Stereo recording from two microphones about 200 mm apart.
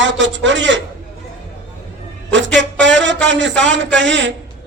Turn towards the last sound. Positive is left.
turn(degrees=-65)  # may be behind; listen again after turning